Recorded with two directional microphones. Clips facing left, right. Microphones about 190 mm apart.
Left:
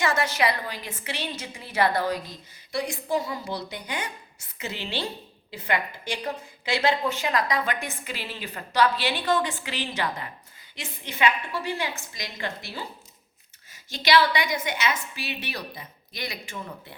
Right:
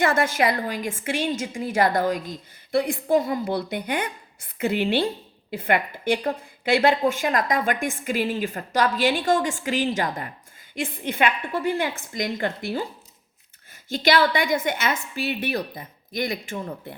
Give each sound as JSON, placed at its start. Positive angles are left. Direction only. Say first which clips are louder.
{"t": 0.0, "sound": "speech", "louder": "right 4 dB", "side_deg": -50}
{"t": 13.9, "sound": "speech", "louder": "right 2 dB", "side_deg": -50}